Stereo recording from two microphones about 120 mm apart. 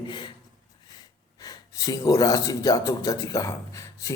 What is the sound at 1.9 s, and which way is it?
Speech, 30° left (ahead or behind).